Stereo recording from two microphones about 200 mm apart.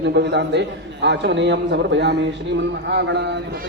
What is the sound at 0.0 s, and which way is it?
Speech, 55° right (ahead or behind).